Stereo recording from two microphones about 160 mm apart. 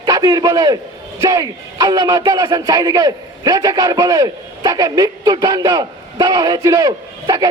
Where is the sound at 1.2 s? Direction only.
25° right (ahead or behind).